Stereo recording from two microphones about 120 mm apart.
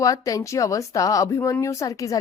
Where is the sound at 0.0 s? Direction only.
30° left (ahead or behind).